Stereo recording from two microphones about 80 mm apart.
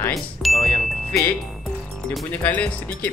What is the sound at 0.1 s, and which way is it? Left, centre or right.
Speech, centre.